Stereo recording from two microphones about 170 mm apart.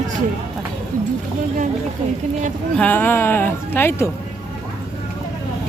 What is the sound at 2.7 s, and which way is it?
Speech, 10° left (ahead or behind).